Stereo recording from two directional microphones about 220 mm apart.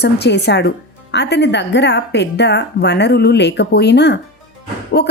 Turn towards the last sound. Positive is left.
turn(degrees=45)  # may be behind; listen again after turning